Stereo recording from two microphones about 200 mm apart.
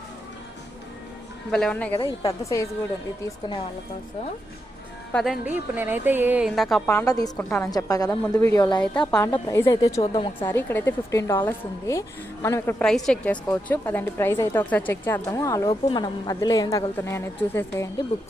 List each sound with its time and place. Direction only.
1.5 s a woman's voice: 5° left (ahead or behind); by 3.6 s 20° left (ahead or behind)
5.1 s a woman's voice: centre (ahead or behind)
6.9 s a woman's voice: 15° left (ahead or behind)
10.0 s a woman's voice: 25° left (ahead or behind)
10.4 s a woman's voice: 10° left (ahead or behind)
12.8 s a woman's voice: 5° left (ahead or behind)